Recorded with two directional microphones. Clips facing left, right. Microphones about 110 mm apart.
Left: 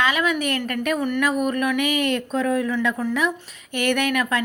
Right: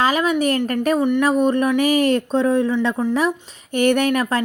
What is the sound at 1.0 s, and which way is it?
A woman's voice, 20° right (ahead or behind).